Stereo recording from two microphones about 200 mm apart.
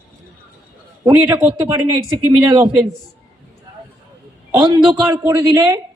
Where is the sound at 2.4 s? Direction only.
20° right (ahead or behind).